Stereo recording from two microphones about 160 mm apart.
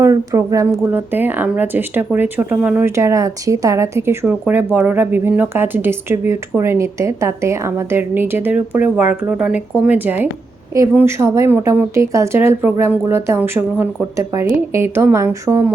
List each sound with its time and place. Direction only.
0.0 s speech: 20° right (ahead or behind)